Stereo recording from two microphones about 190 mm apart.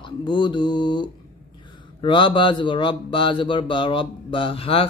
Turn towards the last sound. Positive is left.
turn(degrees=30)  # may be behind; listen again after turning